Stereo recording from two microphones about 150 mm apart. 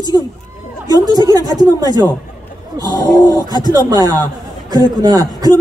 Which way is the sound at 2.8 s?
25° left (ahead or behind).